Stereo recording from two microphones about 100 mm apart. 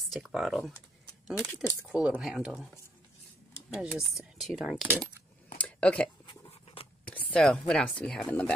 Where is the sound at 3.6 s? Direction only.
5° right (ahead or behind).